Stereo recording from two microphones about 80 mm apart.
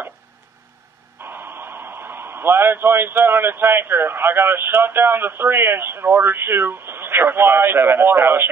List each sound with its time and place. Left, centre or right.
1.2 s speech: right